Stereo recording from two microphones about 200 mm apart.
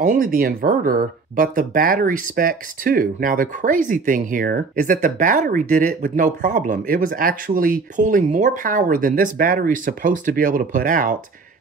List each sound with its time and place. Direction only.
0.0 s speech: 40° right (ahead or behind)